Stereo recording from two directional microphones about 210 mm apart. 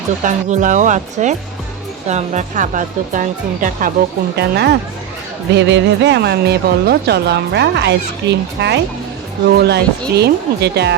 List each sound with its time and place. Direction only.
0.3 s speech: 35° right (ahead or behind)
4.4 s speech: 50° right (ahead or behind)